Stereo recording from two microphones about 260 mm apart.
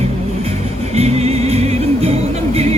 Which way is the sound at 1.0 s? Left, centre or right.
Right.